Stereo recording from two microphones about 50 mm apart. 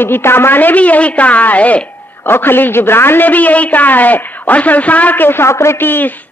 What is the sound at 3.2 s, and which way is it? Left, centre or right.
A man's voice, left.